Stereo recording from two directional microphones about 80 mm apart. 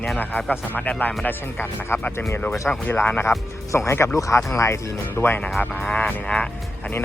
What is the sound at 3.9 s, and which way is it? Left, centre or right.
Speech, left.